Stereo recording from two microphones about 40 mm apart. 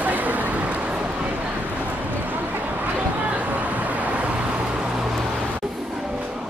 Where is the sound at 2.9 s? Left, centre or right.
Right.